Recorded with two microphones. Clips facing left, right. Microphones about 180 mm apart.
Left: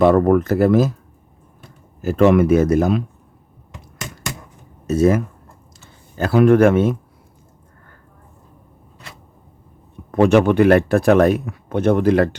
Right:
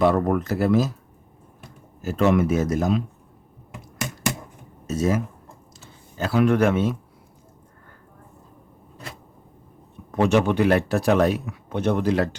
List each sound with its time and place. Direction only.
0.0 s speech: 50° left (ahead or behind)
2.0 s speech: 60° left (ahead or behind)
4.9 s speech: 60° left (ahead or behind)
10.1 s speech: 55° left (ahead or behind)